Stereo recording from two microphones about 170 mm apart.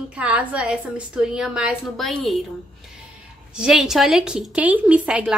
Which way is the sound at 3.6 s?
Centre (ahead or behind).